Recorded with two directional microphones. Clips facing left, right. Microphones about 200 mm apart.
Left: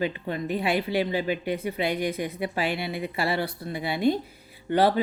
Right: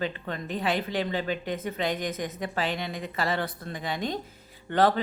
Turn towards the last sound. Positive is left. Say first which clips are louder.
# left 2 dB
turn(degrees=10)  # may be behind; listen again after turning